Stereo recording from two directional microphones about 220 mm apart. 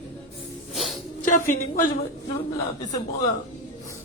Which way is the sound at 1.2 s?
35° left (ahead or behind).